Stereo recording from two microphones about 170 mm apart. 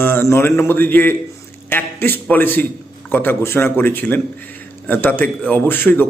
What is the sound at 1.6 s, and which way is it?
Speech, 10° left (ahead or behind).